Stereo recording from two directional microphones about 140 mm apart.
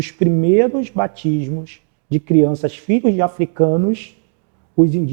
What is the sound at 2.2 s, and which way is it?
Speech, 20° right (ahead or behind).